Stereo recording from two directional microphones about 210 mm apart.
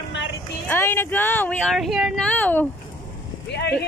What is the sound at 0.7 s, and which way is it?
Speech, 10° left (ahead or behind).